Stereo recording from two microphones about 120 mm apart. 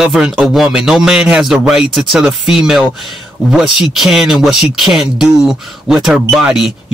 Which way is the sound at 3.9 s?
5° right (ahead or behind).